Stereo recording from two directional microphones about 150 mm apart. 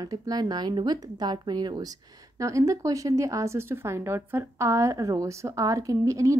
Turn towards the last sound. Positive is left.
turn(degrees=-20)  # may be behind; listen again after turning